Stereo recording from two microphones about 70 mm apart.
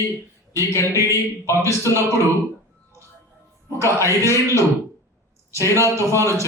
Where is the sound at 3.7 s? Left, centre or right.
Right.